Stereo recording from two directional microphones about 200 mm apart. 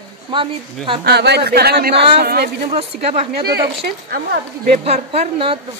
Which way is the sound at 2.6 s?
30° right (ahead or behind).